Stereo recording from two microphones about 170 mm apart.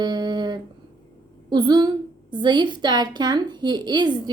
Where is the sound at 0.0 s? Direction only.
25° right (ahead or behind).